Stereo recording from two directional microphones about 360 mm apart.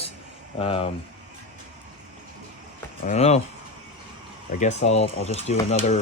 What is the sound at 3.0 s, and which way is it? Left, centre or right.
Speech, centre.